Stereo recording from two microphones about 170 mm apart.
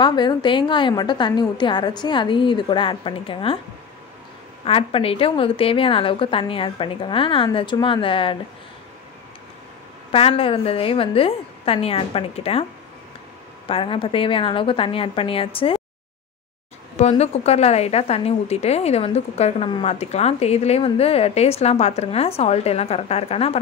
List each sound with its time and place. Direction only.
0.0 s a woman's voice: 25° left (ahead or behind)
4.6 s a woman's voice: 35° left (ahead or behind)
10.1 s a woman's voice: 35° left (ahead or behind)
13.7 s a woman's voice: 30° left (ahead or behind)
16.9 s a woman's voice: 40° left (ahead or behind)